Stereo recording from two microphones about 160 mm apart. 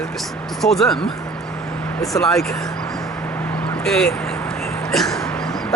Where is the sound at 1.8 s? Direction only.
20° left (ahead or behind).